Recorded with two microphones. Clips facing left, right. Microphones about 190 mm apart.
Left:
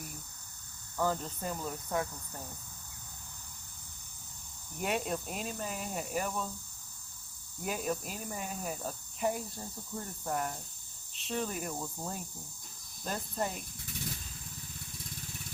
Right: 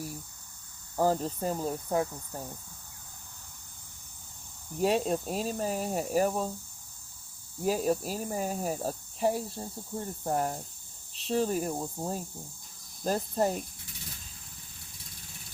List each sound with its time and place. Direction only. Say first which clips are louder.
0.9 s speech: right 6 dB; 35° right (ahead or behind)
4.8 s speech: right 7 dB; 30° right (ahead or behind)
7.6 s speech: right 7 dB; 35° right (ahead or behind)